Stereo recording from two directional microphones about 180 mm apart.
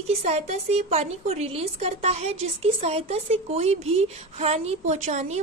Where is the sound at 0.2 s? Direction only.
35° right (ahead or behind).